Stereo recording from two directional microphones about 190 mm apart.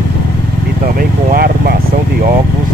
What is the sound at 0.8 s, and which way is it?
Speech, 50° right (ahead or behind).